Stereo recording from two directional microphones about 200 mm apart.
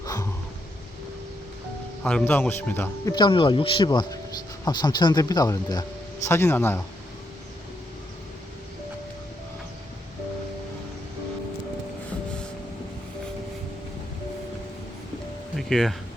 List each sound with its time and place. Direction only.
0.0 s a sound: 15° left (ahead or behind)
2.0 s speech: 5° left (ahead or behind)
3.2 s speech: 25° left (ahead or behind)
15.5 s music: centre (ahead or behind)